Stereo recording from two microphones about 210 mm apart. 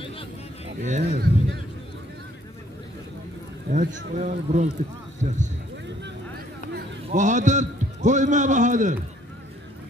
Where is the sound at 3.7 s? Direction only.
35° right (ahead or behind).